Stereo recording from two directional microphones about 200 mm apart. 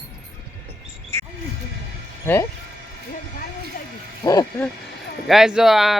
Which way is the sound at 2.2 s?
10° left (ahead or behind).